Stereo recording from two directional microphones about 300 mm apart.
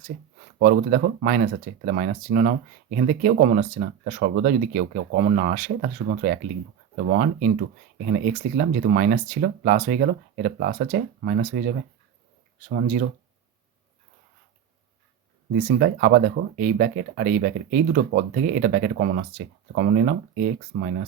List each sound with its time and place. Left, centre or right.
0.6 s speech: right
15.5 s speech: right